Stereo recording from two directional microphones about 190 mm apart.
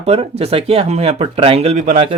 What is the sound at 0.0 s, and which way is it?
Speech, 30° right (ahead or behind).